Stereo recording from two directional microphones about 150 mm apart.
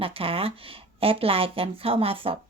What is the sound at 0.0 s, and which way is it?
Speech, 40° right (ahead or behind).